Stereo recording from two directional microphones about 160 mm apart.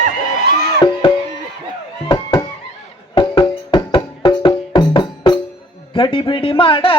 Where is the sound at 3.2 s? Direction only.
30° left (ahead or behind).